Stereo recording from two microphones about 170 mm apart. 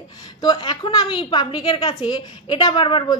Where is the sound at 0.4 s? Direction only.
25° left (ahead or behind).